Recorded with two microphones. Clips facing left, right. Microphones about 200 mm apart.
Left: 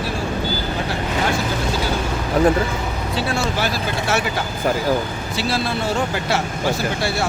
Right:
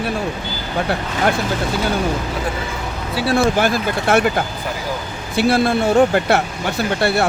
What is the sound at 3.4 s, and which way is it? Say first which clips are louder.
Speech: right 6 dB; 50° right (ahead or behind).